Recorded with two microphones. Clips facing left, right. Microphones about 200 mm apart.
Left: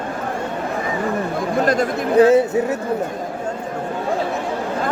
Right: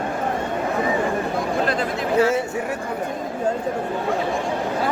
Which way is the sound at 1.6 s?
45° left (ahead or behind).